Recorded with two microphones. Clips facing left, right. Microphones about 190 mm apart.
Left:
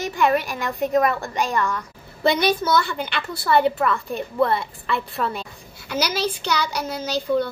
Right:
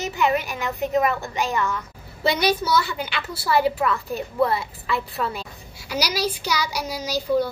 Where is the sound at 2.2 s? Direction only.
55° left (ahead or behind).